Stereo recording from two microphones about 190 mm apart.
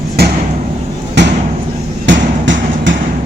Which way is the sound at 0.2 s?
60° right (ahead or behind).